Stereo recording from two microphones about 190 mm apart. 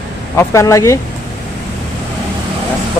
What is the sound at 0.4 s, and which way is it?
Speech, 15° left (ahead or behind).